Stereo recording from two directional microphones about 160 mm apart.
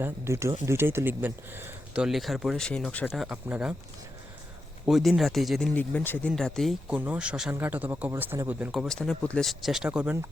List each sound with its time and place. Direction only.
0.0 s speech: 15° right (ahead or behind)
2.0 s speech: centre (ahead or behind)
3.1 s speech: 5° right (ahead or behind)
4.9 s speech: centre (ahead or behind)
8.7 s speech: centre (ahead or behind)